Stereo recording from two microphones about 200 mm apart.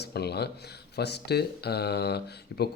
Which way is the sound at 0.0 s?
55° left (ahead or behind).